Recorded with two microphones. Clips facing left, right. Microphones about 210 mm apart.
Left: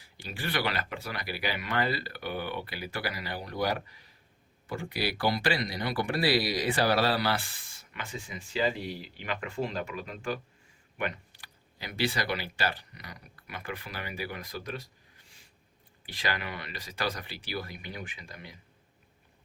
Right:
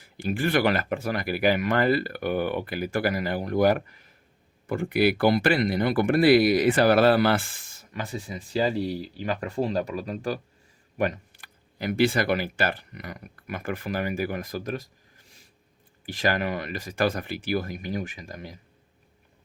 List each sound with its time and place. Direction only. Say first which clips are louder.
0.3 s speech: right 10 dB; 50° right (ahead or behind)
16.0 s speech: right 9 dB; 45° right (ahead or behind)